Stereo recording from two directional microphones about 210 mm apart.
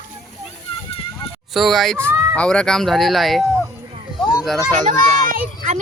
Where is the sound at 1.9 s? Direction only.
10° right (ahead or behind).